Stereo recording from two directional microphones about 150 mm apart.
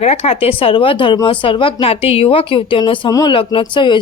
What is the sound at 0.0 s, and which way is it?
Speech, 40° left (ahead or behind).